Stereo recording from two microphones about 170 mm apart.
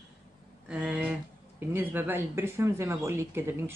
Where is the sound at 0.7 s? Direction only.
5° right (ahead or behind).